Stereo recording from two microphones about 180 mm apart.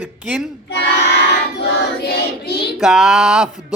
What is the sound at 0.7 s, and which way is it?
Child singing, 70° left (ahead or behind).